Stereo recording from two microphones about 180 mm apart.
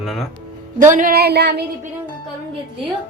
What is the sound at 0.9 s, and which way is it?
Speech, 55° right (ahead or behind).